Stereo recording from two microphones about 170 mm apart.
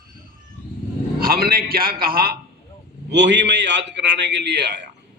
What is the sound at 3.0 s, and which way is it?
A man's voice, 90° right.